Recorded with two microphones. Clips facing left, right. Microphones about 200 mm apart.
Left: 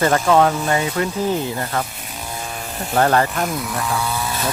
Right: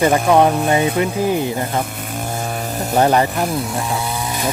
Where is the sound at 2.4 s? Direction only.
50° right (ahead or behind).